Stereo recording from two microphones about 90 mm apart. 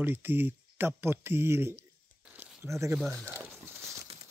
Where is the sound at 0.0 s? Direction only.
25° right (ahead or behind).